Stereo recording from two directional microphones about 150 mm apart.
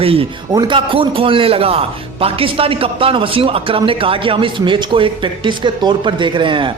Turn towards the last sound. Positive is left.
turn(degrees=-35)  # may be behind; listen again after turning